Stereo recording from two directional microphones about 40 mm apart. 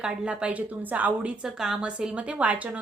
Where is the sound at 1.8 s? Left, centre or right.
Right.